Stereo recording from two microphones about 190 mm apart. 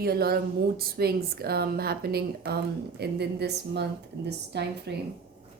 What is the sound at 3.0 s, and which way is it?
A woman's voice, 60° right (ahead or behind).